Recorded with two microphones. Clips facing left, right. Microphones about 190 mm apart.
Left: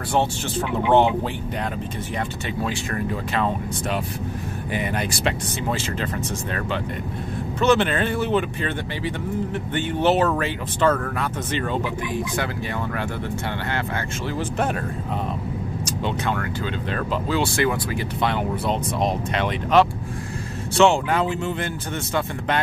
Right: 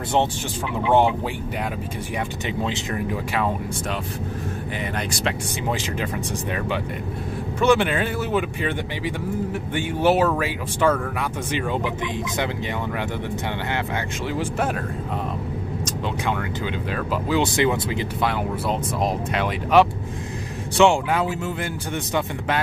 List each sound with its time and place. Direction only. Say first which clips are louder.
2.6 s speech: left 1 dB; 20° right (ahead or behind)
4.7 s speech: left 5 dB; 5° left (ahead or behind)
7.6 s speech: even; 10° right (ahead or behind)
14.3 s speech: even; 5° right (ahead or behind)
16.9 s speech: right 1 dB; 15° right (ahead or behind)
18.2 s speech: left 2 dB; 5° right (ahead or behind)